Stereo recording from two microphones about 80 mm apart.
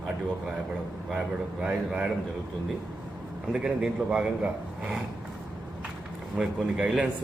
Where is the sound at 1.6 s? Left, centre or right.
Centre.